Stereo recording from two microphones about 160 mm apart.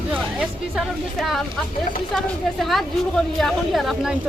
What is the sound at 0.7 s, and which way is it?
Speech, centre (ahead or behind).